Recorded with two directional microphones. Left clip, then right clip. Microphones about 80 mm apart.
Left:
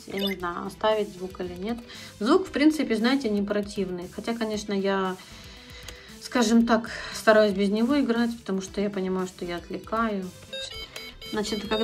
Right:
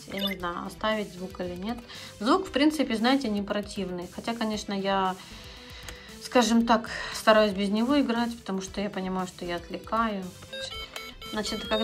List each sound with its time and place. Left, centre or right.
0.1 s speech: right
1.6 s speech: right
6.2 s speech: right
9.1 s music: right
11.3 s speech: centre